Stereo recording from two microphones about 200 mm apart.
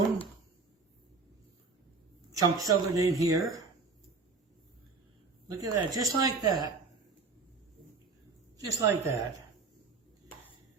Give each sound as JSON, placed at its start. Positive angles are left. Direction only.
{"t": 2.3, "sound": "a woman's voice", "side_deg": -15}
{"t": 5.5, "sound": "speech", "side_deg": -20}
{"t": 8.6, "sound": "a woman's voice", "side_deg": -15}